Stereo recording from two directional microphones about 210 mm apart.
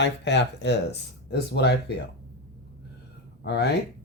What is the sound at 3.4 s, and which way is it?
Speech, 50° left (ahead or behind).